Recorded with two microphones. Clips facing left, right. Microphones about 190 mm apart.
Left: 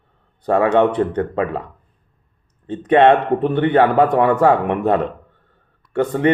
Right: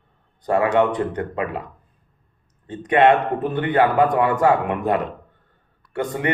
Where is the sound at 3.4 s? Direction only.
25° left (ahead or behind).